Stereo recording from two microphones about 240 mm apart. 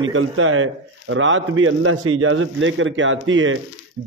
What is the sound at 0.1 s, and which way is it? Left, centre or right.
A man's voice, right.